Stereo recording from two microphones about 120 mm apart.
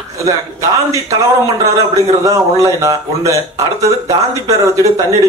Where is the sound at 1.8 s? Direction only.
30° right (ahead or behind).